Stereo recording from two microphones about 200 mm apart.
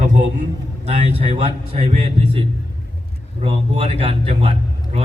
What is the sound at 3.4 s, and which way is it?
A man's voice, 30° right (ahead or behind).